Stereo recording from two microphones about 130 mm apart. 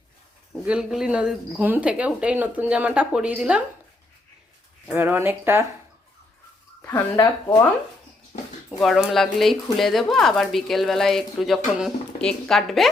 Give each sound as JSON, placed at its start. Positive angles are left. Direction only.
{"t": 0.6, "sound": "speech", "side_deg": -5}
{"t": 4.9, "sound": "speech", "side_deg": -15}
{"t": 7.2, "sound": "speech", "side_deg": 30}
{"t": 8.8, "sound": "speech", "side_deg": 0}